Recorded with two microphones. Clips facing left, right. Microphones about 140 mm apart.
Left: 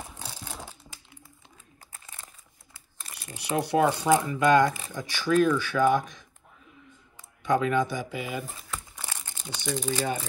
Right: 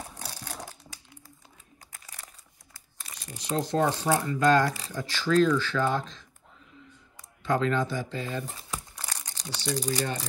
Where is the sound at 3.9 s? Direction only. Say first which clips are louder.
Left 3 dB; 15° left (ahead or behind).